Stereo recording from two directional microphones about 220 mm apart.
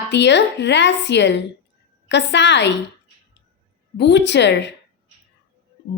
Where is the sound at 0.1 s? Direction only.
50° left (ahead or behind).